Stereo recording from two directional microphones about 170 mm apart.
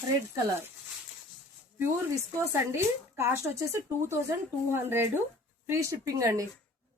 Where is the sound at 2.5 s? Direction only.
15° right (ahead or behind).